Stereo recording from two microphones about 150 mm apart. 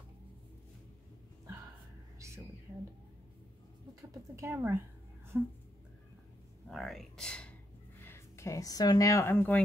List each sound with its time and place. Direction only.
2.1 s music: 20° right (ahead or behind)
4.1 s speech: 15° right (ahead or behind)
6.7 s speech: centre (ahead or behind)
8.0 s speech: 15° left (ahead or behind)